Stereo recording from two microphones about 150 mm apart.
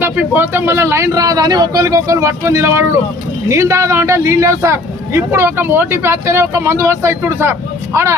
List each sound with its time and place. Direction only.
0.0 s a man's voice: 15° right (ahead or behind)